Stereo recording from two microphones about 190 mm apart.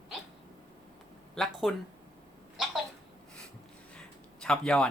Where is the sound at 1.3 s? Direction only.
Centre (ahead or behind).